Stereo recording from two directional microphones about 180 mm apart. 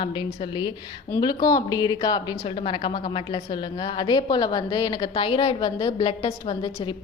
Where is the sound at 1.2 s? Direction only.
20° left (ahead or behind).